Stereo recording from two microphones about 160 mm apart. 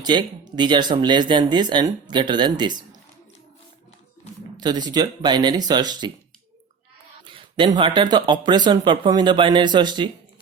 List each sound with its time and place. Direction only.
0.0 s speech: 25° right (ahead or behind)
4.5 s speech: 25° right (ahead or behind)
7.3 s a sound: 30° right (ahead or behind)
7.8 s speech: 30° right (ahead or behind)